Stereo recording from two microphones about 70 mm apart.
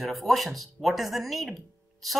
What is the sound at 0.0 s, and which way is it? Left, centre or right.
A woman's voice, centre.